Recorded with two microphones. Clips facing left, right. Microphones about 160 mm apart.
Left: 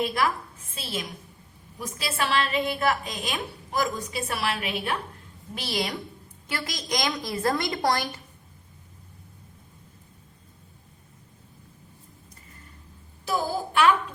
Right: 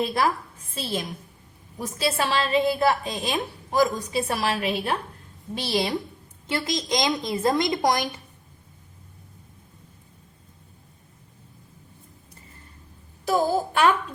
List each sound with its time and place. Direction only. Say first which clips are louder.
0.0 s a woman's voice: right 2 dB; 30° right (ahead or behind)
13.2 s a woman's voice: right 5 dB; 40° right (ahead or behind)